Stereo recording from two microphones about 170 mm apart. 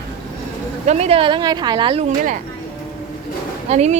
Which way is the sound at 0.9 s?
35° right (ahead or behind).